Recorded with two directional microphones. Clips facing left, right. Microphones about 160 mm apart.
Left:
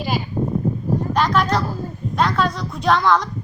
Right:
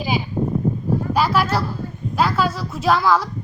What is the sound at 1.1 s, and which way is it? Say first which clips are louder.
A woman's voice: even; 5° right (ahead or behind).